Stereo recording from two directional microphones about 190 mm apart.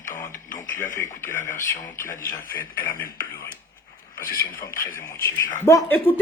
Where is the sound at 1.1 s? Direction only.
15° left (ahead or behind).